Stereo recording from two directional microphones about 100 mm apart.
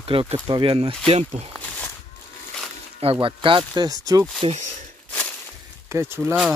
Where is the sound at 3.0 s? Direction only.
60° right (ahead or behind).